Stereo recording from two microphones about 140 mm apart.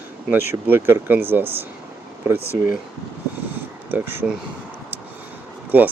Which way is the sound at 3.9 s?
15° right (ahead or behind).